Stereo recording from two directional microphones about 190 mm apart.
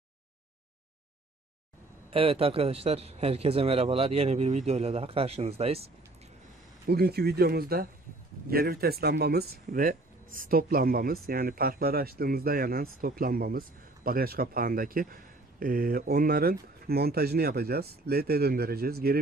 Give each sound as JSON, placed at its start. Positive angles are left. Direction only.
{"t": 2.0, "sound": "a man's voice", "side_deg": -30}
{"t": 6.9, "sound": "speech", "side_deg": -55}